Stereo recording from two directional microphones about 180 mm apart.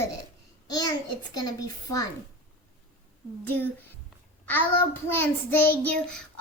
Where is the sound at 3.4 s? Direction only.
10° left (ahead or behind).